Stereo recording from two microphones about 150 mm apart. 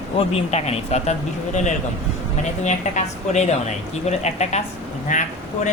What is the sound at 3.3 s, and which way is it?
Speech, 50° left (ahead or behind).